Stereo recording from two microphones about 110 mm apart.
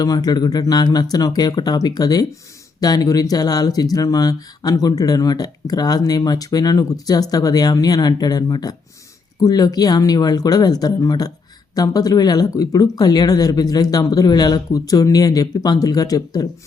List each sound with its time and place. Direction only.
0.0 s speech: 35° left (ahead or behind)